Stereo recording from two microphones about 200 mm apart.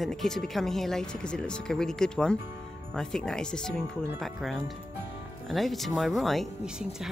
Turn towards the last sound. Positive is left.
turn(degrees=0)  # may be behind; listen again after turning